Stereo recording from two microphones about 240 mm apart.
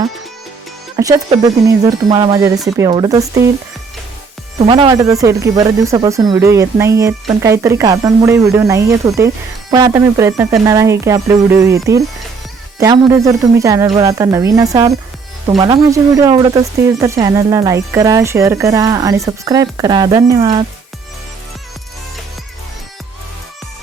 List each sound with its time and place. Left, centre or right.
0.9 s speech: centre
4.6 s speech: centre